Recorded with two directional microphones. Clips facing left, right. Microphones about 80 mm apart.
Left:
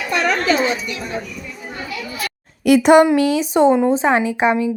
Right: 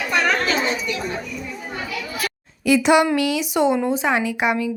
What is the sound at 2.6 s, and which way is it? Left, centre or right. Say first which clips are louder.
A child's voice: left 5 dB; left.